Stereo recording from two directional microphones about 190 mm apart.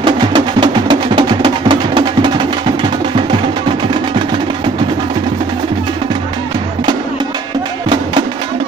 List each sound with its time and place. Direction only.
0.0 s music: 25° right (ahead or behind)